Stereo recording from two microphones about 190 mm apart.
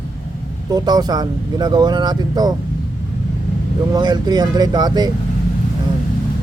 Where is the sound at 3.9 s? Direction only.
20° right (ahead or behind).